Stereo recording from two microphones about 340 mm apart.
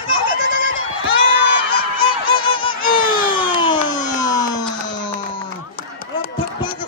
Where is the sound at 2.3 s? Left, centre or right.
Centre.